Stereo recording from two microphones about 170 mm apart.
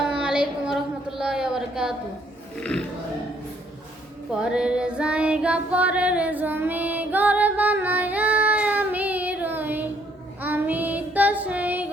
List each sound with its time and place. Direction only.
0.1 s a sound: 5° right (ahead or behind)
4.3 s female singing: 5° right (ahead or behind)
10.4 s child singing: 10° right (ahead or behind)